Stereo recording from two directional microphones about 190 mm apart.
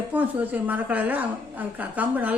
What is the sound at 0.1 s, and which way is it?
A woman's voice, 10° right (ahead or behind).